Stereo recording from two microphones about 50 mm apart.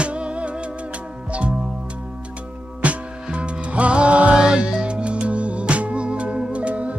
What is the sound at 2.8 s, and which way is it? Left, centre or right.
Music, right.